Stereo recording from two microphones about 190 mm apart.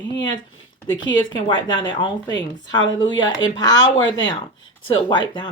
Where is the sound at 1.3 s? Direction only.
25° left (ahead or behind).